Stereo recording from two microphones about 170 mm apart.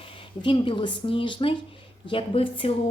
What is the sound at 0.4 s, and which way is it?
A woman's voice, 30° left (ahead or behind).